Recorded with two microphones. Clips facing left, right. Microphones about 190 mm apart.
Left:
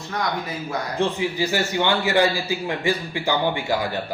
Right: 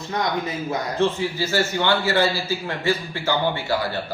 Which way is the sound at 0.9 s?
15° left (ahead or behind).